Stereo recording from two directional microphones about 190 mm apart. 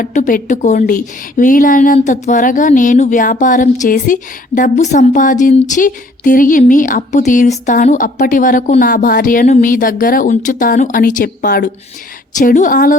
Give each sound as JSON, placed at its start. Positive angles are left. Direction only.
{"t": 0.0, "sound": "a woman's voice", "side_deg": 45}